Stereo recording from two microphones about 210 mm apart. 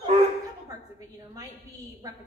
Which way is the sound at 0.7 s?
15° right (ahead or behind).